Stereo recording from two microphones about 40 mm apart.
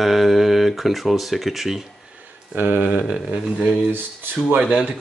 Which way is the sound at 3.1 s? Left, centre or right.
Right.